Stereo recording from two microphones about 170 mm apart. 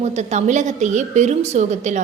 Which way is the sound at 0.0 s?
40° right (ahead or behind).